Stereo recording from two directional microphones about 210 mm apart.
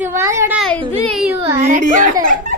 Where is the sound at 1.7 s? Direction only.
35° right (ahead or behind).